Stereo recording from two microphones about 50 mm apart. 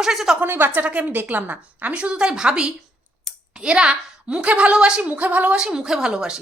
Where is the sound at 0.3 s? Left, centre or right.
Right; by 5.0 s centre.